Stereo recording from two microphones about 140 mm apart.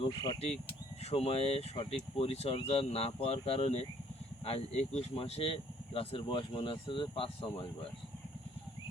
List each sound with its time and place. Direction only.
0.0 s speech: 35° left (ahead or behind)
1.1 s speech: 45° left (ahead or behind)